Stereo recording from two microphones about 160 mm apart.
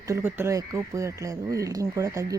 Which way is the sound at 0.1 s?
15° right (ahead or behind).